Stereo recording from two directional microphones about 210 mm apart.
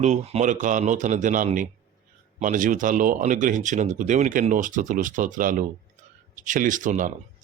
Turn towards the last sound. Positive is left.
turn(degrees=-35)  # may be behind; listen again after turning